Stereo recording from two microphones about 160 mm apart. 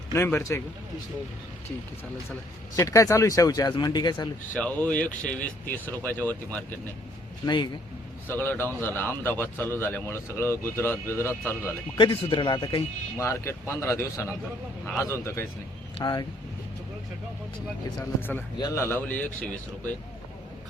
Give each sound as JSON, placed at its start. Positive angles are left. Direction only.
{"t": 0.1, "sound": "speech", "side_deg": 15}
{"t": 2.7, "sound": "a man's voice", "side_deg": 20}
{"t": 4.5, "sound": "speech", "side_deg": 10}
{"t": 7.4, "sound": "a man's voice", "side_deg": 30}
{"t": 8.3, "sound": "speech", "side_deg": 15}
{"t": 11.9, "sound": "a man's voice", "side_deg": 30}
{"t": 16.0, "sound": "speech", "side_deg": 25}
{"t": 17.9, "sound": "speech", "side_deg": 10}